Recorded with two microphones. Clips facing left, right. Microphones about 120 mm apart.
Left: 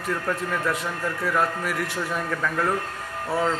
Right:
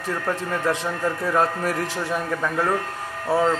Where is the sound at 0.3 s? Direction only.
25° right (ahead or behind).